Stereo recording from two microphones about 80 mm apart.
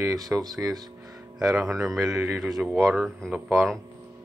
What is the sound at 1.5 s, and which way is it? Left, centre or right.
Speech, right.